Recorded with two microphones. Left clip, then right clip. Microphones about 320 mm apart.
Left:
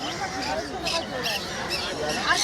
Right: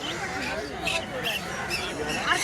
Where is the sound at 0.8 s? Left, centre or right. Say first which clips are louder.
Right 1 dB; left.